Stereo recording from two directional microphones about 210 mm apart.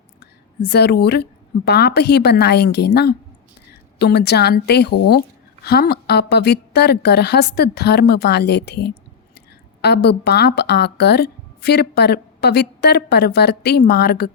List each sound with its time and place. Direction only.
0.2 s a woman's voice: 50° left (ahead or behind)